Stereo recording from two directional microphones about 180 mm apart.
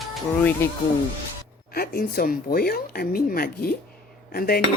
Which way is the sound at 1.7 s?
55° left (ahead or behind).